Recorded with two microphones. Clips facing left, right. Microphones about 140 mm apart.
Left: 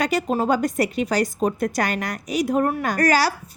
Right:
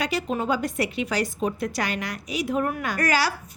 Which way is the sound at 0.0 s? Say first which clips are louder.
Left 5 dB; 45° left (ahead or behind).